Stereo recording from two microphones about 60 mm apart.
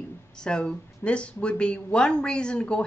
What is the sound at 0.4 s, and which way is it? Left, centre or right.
Speech, centre.